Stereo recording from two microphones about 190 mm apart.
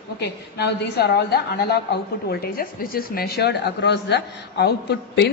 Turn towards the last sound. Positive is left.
turn(degrees=60)  # may be behind; listen again after turning